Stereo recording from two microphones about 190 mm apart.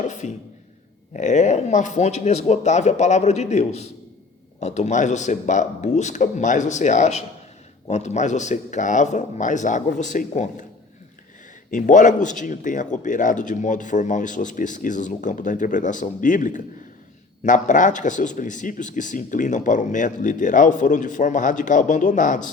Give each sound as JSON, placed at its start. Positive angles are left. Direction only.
{"t": 0.1, "sound": "speech", "side_deg": 40}
{"t": 11.7, "sound": "speech", "side_deg": 40}